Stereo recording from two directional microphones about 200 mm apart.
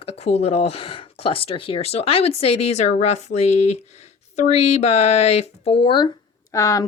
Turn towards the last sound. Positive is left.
turn(degrees=15)  # may be behind; listen again after turning